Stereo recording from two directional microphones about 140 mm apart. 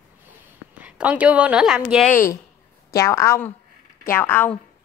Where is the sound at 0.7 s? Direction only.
10° right (ahead or behind).